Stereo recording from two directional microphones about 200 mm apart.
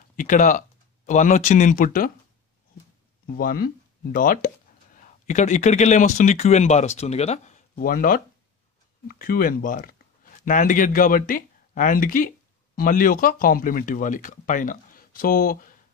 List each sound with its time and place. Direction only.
0.1 s speech: 40° left (ahead or behind)
3.3 s speech: 45° left (ahead or behind)